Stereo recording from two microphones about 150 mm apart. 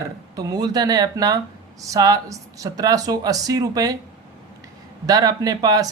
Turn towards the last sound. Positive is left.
turn(degrees=-25)  # may be behind; listen again after turning